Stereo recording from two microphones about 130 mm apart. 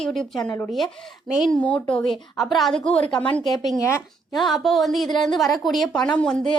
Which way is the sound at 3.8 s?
25° left (ahead or behind).